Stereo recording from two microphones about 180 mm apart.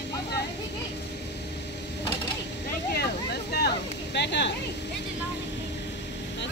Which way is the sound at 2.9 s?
65° left (ahead or behind).